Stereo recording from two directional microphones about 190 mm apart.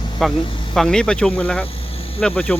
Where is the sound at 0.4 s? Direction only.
25° left (ahead or behind).